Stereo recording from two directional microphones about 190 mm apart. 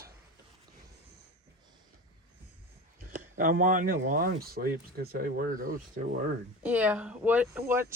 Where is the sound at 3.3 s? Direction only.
45° right (ahead or behind).